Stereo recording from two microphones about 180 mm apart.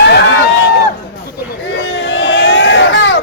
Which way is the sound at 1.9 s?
80° left.